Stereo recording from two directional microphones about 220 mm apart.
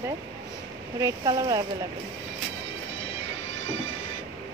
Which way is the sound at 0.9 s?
15° right (ahead or behind).